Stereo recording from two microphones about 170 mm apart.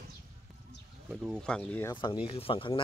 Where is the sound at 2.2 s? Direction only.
30° left (ahead or behind).